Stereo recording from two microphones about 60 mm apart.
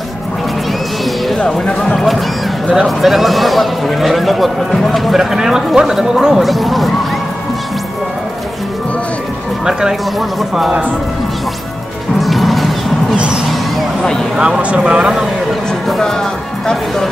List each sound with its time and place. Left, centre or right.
1.0 s a sound: centre
1.5 s speech: centre
2.0 s a sound: centre
3.0 s speech: centre
9.7 s speech: centre
12.2 s music: centre
13.1 s music: centre
14.3 s speech: centre
14.6 s speech: right
15.9 s speech: centre